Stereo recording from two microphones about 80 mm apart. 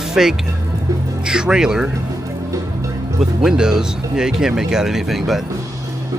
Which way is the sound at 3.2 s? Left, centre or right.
Centre.